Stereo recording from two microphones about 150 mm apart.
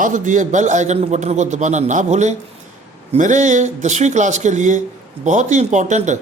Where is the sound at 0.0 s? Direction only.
55° right (ahead or behind).